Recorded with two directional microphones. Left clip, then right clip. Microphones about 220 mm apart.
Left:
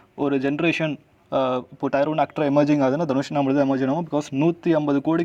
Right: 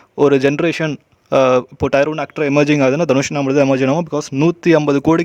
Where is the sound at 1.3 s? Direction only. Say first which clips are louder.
Right 10 dB; 70° right (ahead or behind).